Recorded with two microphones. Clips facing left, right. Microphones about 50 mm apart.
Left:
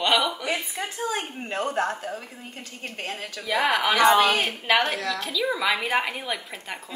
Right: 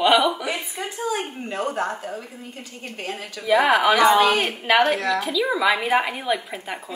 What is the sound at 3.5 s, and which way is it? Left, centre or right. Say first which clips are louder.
Speech: right 6 dB; centre.